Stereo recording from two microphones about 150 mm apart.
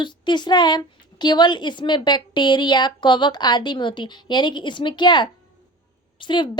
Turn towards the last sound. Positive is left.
turn(degrees=30)  # may be behind; listen again after turning